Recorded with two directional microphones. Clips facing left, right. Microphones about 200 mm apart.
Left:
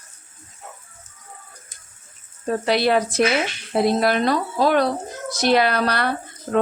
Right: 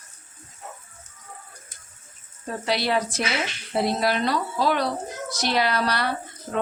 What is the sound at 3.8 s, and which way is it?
Speech, 50° left (ahead or behind).